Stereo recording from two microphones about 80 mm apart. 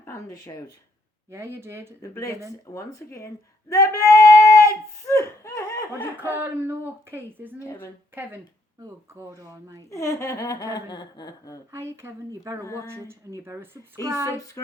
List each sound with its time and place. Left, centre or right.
0.0 s speech: left
1.3 s speech: right
2.0 s speech: left
6.1 s speech: right
7.6 s speech: left
8.1 s speech: right
9.9 s speech: left
11.7 s speech: right
14.0 s speech: left